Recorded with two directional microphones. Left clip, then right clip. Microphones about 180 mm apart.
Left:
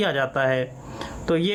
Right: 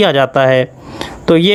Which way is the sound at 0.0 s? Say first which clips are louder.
Right 12 dB; 40° right (ahead or behind).